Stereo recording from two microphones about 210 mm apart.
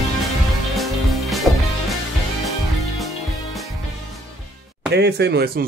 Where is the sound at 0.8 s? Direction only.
Centre (ahead or behind).